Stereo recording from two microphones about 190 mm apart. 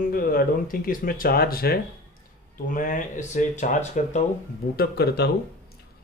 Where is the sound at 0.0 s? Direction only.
50° left (ahead or behind).